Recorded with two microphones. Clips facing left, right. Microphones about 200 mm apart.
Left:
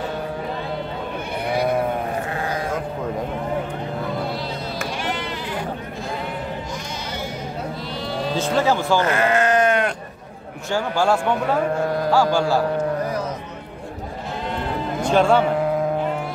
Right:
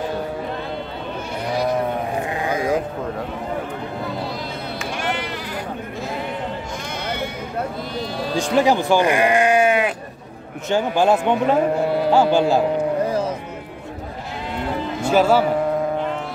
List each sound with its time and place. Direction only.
1.4 s sheep: 55° left (ahead or behind)
8.4 s speech: 15° right (ahead or behind)
10.7 s speech: 20° right (ahead or behind)
15.0 s speech: 5° right (ahead or behind)